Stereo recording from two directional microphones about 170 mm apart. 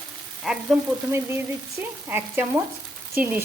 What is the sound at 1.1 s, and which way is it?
Speech, 15° right (ahead or behind).